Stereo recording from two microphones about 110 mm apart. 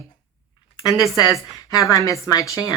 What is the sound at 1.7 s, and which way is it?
Speech, 30° left (ahead or behind).